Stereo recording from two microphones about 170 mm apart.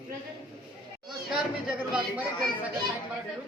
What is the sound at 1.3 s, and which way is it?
Speech, 5° right (ahead or behind).